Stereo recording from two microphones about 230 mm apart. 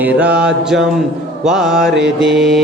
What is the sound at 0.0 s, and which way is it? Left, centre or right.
Mantra, centre.